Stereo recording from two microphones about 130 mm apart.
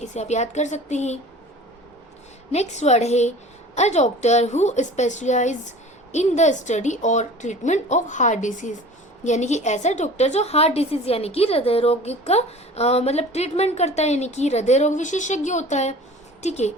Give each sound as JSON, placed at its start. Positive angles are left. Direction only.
{"t": 0.0, "sound": "a woman's voice", "side_deg": 60}
{"t": 2.5, "sound": "a woman's voice", "side_deg": 60}